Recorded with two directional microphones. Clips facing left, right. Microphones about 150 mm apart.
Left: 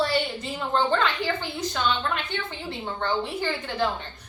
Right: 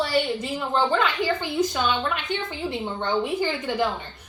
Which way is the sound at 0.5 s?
10° right (ahead or behind).